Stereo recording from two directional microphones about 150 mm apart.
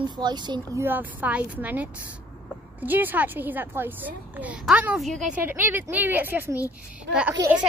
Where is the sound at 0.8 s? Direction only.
10° right (ahead or behind).